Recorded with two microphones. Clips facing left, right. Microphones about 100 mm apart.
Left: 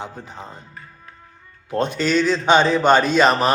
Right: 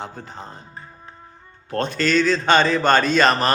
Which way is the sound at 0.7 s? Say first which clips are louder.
Right 2 dB; 30° right (ahead or behind).